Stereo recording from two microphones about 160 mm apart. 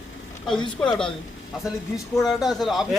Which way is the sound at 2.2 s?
Centre (ahead or behind).